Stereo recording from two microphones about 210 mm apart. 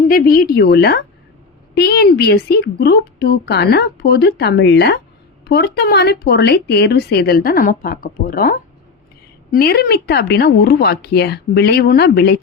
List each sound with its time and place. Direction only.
0.1 s a woman's voice: 45° left (ahead or behind)